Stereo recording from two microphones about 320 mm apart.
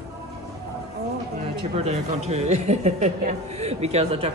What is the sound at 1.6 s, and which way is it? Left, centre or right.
Speech, centre.